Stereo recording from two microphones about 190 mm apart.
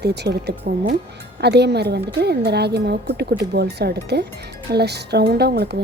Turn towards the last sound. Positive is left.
turn(degrees=-55)  # may be behind; listen again after turning